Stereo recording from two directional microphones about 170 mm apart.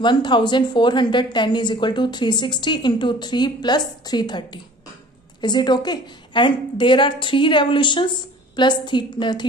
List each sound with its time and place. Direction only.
0.0 s a woman's voice: 25° left (ahead or behind)